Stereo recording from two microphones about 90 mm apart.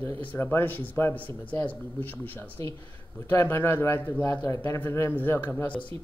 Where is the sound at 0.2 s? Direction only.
20° left (ahead or behind).